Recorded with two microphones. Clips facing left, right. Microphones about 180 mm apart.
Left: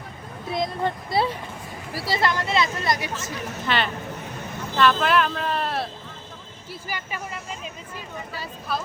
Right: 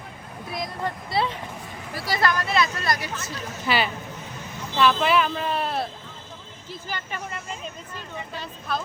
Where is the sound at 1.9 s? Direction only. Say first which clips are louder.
Even; 30° left (ahead or behind).